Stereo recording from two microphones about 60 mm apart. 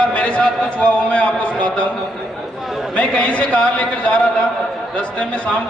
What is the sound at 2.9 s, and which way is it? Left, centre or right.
A man's voice, left.